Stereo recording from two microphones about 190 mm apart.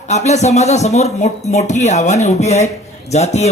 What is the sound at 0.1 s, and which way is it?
A man's voice, 35° left (ahead or behind).